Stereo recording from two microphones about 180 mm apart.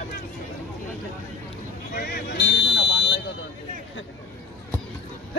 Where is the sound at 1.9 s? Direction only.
60° left (ahead or behind).